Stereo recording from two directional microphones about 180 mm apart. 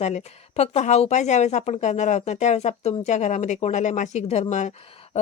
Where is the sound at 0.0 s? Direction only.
40° left (ahead or behind).